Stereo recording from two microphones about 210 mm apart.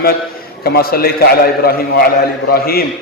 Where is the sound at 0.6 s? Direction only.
45° left (ahead or behind).